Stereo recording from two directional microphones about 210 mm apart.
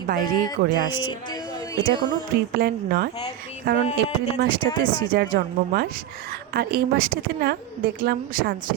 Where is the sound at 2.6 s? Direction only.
45° right (ahead or behind).